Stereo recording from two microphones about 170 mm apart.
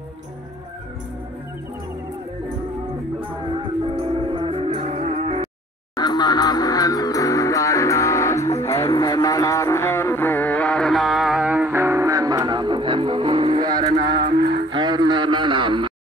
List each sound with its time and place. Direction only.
3.8 s music: 30° right (ahead or behind)
4.9 s livestock: 45° right (ahead or behind)
5.9 s music: 25° left (ahead or behind); by 13.8 s 25° right (ahead or behind)
13.9 s cattle: 60° right (ahead or behind)
14.7 s a sound: 25° right (ahead or behind)